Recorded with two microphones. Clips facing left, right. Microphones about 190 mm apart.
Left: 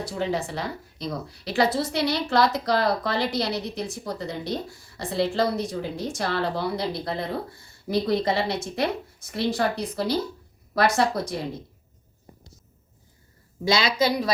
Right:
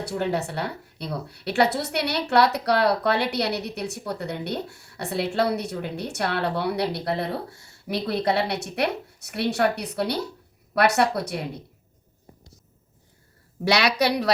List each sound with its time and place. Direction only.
0.0 s a woman's voice: 65° right (ahead or behind)
13.7 s a woman's voice: 70° right (ahead or behind)